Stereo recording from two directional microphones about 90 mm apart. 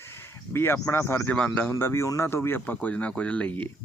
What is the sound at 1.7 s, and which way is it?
Speech, 30° left (ahead or behind).